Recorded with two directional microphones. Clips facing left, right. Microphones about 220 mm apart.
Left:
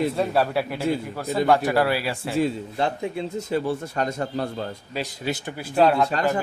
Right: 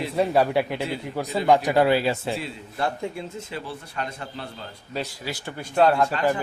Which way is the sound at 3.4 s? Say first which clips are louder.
Left 9 dB; 40° left (ahead or behind).